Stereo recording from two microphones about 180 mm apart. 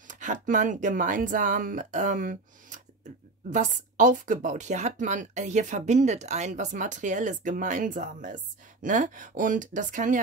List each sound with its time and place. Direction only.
0.1 s speech: 45° right (ahead or behind)